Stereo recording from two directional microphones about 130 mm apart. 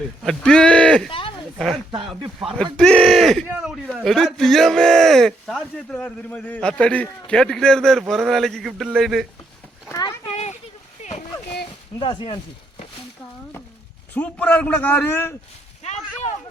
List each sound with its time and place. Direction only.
0.2 s a man's voice: 5° left (ahead or behind)
2.7 s a man's voice: 10° left (ahead or behind); by 3.8 s 10° right (ahead or behind)
3.9 s a man's voice: 5° left (ahead or behind)
10.3 s a sound: 55° left (ahead or behind)
11.9 s speech: 40° left (ahead or behind)
14.1 s a man's voice: 10° left (ahead or behind)